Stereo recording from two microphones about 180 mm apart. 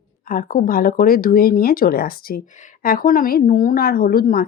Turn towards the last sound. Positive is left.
turn(degrees=55)  # may be behind; listen again after turning